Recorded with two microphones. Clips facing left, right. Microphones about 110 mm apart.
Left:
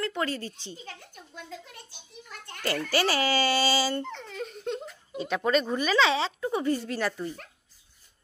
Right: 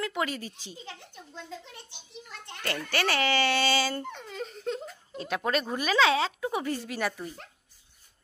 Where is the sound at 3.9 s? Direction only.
10° right (ahead or behind).